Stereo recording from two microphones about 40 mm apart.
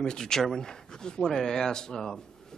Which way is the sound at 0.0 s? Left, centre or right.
Centre.